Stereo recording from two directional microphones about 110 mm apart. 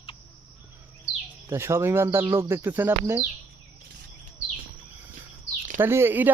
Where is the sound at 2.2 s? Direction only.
35° right (ahead or behind).